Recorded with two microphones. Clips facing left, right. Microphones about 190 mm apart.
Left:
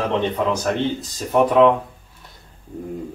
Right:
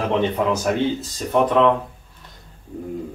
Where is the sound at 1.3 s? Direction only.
10° left (ahead or behind).